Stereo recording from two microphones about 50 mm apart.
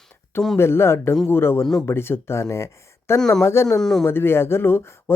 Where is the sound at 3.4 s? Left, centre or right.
Left.